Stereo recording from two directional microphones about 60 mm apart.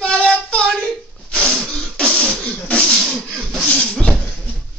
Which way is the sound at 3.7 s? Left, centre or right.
Centre.